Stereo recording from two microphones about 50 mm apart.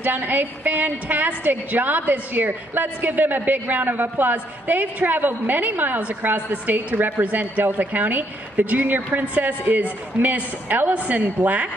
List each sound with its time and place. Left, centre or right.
0.0 s a woman's voice: right